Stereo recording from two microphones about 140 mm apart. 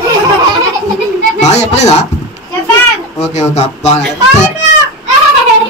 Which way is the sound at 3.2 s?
55° left (ahead or behind).